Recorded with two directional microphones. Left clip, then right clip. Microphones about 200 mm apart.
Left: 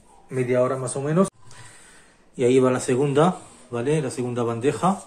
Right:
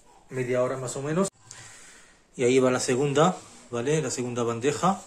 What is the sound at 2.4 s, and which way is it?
A man's voice, 5° right (ahead or behind).